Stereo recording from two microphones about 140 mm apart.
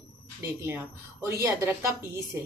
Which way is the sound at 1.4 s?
20° right (ahead or behind).